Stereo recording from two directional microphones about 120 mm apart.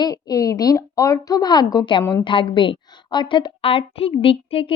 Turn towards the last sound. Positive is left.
turn(degrees=50)  # may be behind; listen again after turning